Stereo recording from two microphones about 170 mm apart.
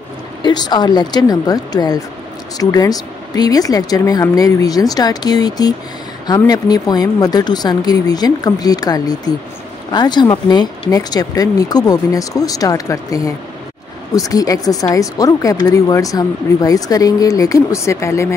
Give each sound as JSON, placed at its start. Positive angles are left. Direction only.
{"t": 0.4, "sound": "speech", "side_deg": 25}